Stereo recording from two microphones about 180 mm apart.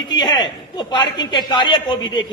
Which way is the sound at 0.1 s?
25° left (ahead or behind).